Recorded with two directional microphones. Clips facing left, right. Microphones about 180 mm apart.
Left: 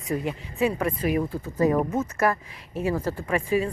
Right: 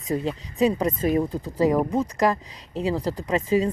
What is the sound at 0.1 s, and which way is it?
Speech, 25° right (ahead or behind).